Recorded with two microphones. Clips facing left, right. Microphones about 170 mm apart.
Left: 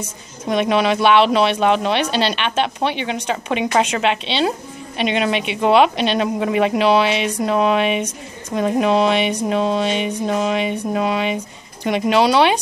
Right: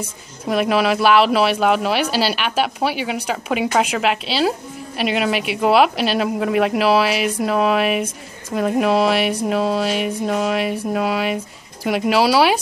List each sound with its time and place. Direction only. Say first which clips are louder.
0.5 s speech: even; 5° right (ahead or behind)